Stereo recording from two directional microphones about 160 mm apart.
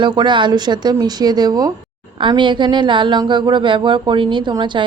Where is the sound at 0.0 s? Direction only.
30° right (ahead or behind).